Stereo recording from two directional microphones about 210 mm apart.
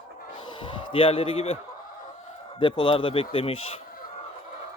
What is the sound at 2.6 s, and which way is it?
Speech, 25° left (ahead or behind).